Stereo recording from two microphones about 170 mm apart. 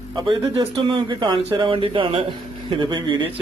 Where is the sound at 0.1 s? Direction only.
25° right (ahead or behind).